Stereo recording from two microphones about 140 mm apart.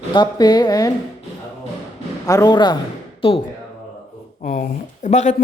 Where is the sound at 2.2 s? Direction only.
25° left (ahead or behind).